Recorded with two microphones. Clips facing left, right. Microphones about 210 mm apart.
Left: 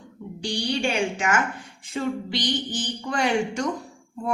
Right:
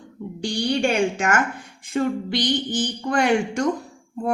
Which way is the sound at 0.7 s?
50° right (ahead or behind).